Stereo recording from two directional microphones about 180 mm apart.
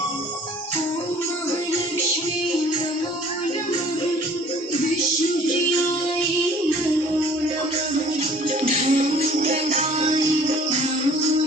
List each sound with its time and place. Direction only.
8.6 s music: 40° right (ahead or behind)